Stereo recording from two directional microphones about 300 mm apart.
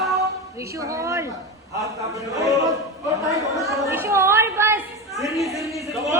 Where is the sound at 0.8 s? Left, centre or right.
Centre.